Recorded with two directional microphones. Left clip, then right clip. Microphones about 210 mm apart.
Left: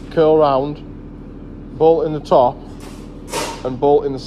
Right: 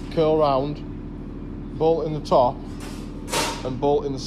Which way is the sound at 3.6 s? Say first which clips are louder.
Left 10 dB; 25° left (ahead or behind).